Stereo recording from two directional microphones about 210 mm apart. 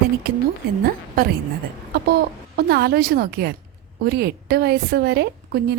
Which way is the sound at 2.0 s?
50° right (ahead or behind).